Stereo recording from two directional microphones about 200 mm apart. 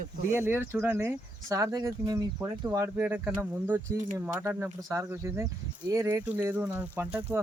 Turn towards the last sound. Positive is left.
turn(degrees=-10)  # may be behind; listen again after turning